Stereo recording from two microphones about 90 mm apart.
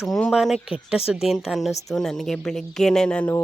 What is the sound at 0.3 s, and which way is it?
Speech, centre (ahead or behind).